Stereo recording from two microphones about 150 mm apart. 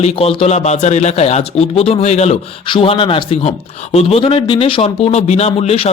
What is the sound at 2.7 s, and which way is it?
A man's voice, 35° left (ahead or behind).